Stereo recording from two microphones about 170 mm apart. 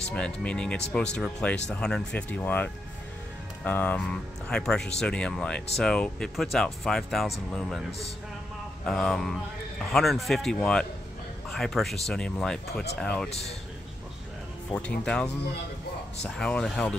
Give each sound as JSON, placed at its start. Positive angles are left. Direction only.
{"t": 0.1, "sound": "a man's voice", "side_deg": 5}
{"t": 8.8, "sound": "a man's voice", "side_deg": 5}
{"t": 13.3, "sound": "speech", "side_deg": 40}
{"t": 14.7, "sound": "a man's voice", "side_deg": 5}